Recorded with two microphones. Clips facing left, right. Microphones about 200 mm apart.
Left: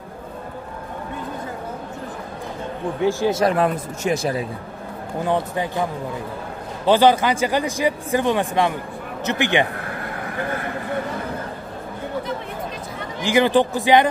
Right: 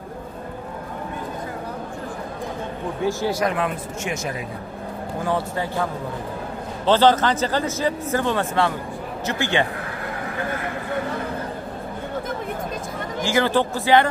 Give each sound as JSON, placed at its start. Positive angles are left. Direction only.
{"t": 3.0, "sound": "a man's voice", "side_deg": 15}
{"t": 3.4, "sound": "speech", "side_deg": 40}
{"t": 5.2, "sound": "a man's voice", "side_deg": 20}
{"t": 6.9, "sound": "a man's voice", "side_deg": 10}
{"t": 13.2, "sound": "a man's voice", "side_deg": 15}